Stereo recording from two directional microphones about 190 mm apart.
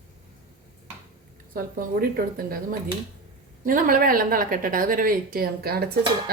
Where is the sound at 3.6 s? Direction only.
45° right (ahead or behind).